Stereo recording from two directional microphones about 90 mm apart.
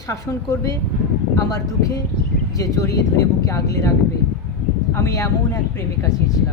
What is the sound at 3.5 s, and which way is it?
Speech, 35° left (ahead or behind).